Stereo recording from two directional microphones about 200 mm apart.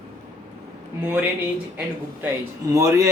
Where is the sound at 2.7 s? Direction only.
15° right (ahead or behind).